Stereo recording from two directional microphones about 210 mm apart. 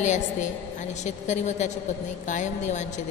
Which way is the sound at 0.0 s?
35° left (ahead or behind).